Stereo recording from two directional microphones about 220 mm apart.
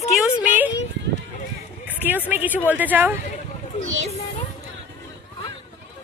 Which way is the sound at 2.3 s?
5° right (ahead or behind).